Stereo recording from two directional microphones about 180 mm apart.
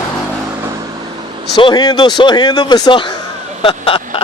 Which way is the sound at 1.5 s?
25° left (ahead or behind).